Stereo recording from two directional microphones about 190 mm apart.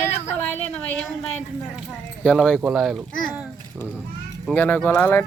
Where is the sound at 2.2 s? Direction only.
5° left (ahead or behind).